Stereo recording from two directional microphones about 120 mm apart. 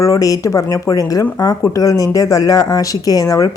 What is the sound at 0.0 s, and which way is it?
Speech, 30° left (ahead or behind).